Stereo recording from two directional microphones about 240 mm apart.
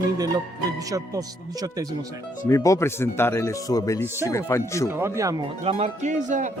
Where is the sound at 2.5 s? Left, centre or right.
Centre.